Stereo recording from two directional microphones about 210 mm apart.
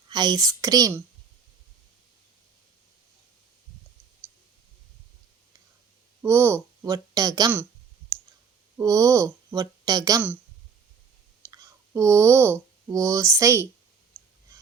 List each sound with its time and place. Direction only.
0.1 s a child's voice: 20° right (ahead or behind)
6.2 s a sound: 10° right (ahead or behind)
8.8 s speech: 15° right (ahead or behind)
11.5 s speech: 15° right (ahead or behind)